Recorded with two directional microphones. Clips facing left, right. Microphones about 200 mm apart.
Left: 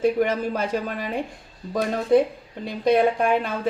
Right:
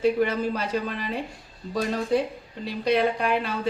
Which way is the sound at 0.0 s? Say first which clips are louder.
Left 1 dB; 50° left (ahead or behind).